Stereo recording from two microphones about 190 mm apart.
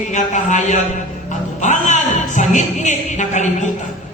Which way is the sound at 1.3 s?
40° left (ahead or behind).